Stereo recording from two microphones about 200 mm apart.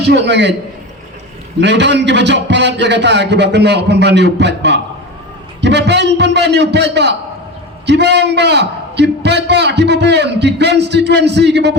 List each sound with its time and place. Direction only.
0.1 s a man's voice: 60° right (ahead or behind)
1.6 s a man's voice: 60° right (ahead or behind)